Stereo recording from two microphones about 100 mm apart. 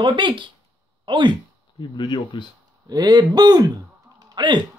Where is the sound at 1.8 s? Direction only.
50° left (ahead or behind).